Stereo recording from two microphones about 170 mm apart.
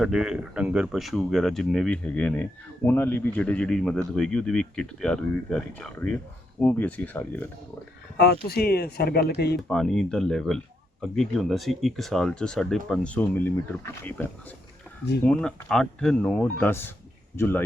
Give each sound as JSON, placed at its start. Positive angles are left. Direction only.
{"t": 0.0, "sound": "speech", "side_deg": -5}
{"t": 8.2, "sound": "speech", "side_deg": 65}
{"t": 9.6, "sound": "speech", "side_deg": 0}